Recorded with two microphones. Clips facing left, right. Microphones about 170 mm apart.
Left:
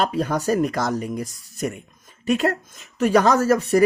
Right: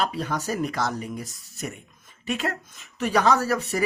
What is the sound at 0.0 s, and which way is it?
Speech, 45° left (ahead or behind).